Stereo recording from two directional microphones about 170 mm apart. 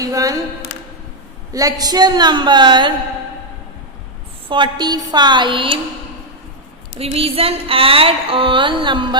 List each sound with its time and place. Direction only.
0.0 s a sound: 20° right (ahead or behind)
1.5 s a woman's voice: 20° right (ahead or behind)
4.4 s a woman's voice: 25° right (ahead or behind)
7.0 s music: 35° right (ahead or behind)